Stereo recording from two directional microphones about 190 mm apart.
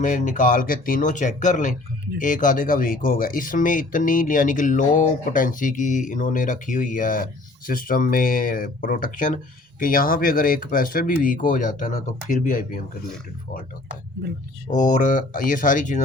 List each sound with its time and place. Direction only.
0.0 s speech: 45° left (ahead or behind)
14.7 s speech: 40° left (ahead or behind)